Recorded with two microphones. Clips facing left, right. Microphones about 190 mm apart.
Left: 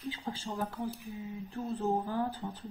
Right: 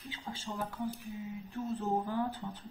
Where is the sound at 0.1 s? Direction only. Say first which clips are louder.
Even; 35° left (ahead or behind).